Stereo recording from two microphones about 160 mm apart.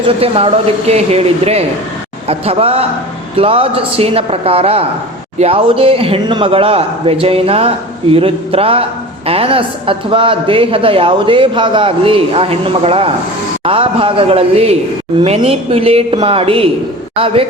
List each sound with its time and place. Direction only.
0.0 s a woman's voice: 35° right (ahead or behind)